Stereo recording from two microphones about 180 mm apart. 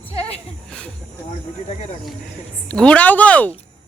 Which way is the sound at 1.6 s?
35° left (ahead or behind).